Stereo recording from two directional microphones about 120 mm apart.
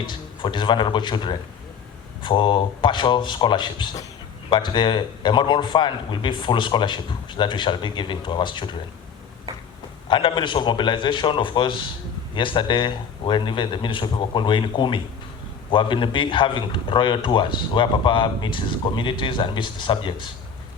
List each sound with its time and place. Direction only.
0.0 s a man's voice: 40° left (ahead or behind)
10.1 s a man's voice: 45° left (ahead or behind)